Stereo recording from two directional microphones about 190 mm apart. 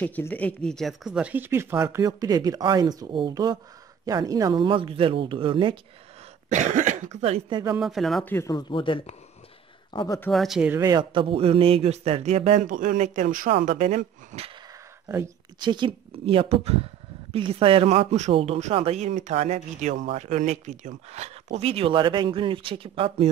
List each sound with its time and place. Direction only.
0.0 s speech: 10° left (ahead or behind); by 5.8 s 25° right (ahead or behind)
6.5 s a man's voice: 40° right (ahead or behind); by 7.7 s 25° right (ahead or behind)
7.7 s speech: centre (ahead or behind)
8.4 s speech: 20° left (ahead or behind)
9.9 s speech: 15° left (ahead or behind)
10.3 s speech: centre (ahead or behind)
10.8 s a man's voice: 20° right (ahead or behind)
15.0 s a man's voice: 15° right (ahead or behind); by 23.3 s 30° right (ahead or behind)